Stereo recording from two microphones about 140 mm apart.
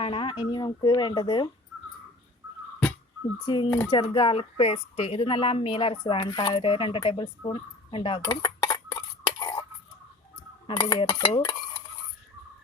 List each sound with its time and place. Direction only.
0.0 s speech: 40° left (ahead or behind)
3.4 s speech: 35° left (ahead or behind)
3.7 s speech: 20° left (ahead or behind)
3.9 s speech: 35° left (ahead or behind)
10.7 s speech: 35° left (ahead or behind)